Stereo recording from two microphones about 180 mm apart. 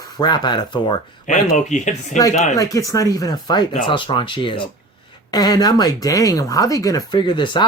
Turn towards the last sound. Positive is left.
turn(degrees=25)  # may be behind; listen again after turning